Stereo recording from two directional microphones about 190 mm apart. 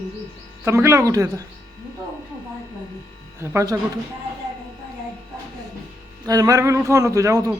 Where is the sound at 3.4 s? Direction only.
15° right (ahead or behind).